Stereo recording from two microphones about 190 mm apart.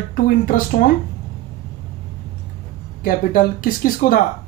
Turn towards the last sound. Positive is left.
turn(degrees=45)  # may be behind; listen again after turning